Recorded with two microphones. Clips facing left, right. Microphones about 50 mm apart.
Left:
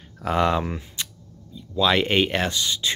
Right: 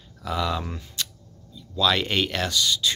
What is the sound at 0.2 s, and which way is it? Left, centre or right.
Speech, left.